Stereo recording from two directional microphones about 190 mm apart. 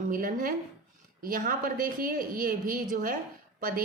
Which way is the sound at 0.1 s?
45° right (ahead or behind).